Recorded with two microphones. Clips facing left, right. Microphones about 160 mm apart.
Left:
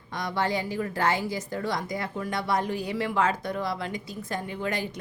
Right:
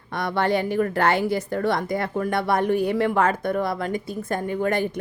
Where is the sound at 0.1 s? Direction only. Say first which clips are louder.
Right 6 dB; 60° right (ahead or behind).